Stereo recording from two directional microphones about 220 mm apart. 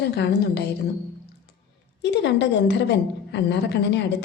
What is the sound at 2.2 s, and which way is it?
A woman's voice, 55° left (ahead or behind).